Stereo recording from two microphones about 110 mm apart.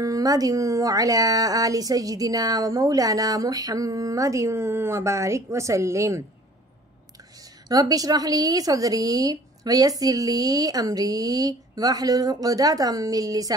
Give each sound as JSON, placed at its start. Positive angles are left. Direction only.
{"t": 0.0, "sound": "speech", "side_deg": -35}
{"t": 7.6, "sound": "speech", "side_deg": -35}